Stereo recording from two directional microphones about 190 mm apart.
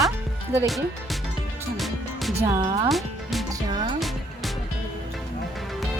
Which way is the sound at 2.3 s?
30° right (ahead or behind).